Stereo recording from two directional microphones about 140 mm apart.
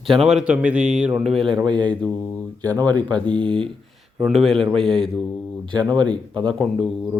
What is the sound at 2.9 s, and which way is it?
Speech, 30° right (ahead or behind).